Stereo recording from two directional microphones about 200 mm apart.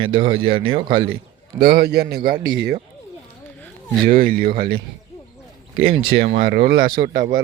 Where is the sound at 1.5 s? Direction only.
50° right (ahead or behind).